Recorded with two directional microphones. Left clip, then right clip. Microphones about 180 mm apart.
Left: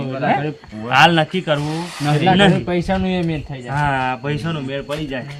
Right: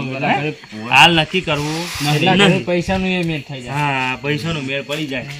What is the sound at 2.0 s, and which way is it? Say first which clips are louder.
Speech: even; 10° left (ahead or behind).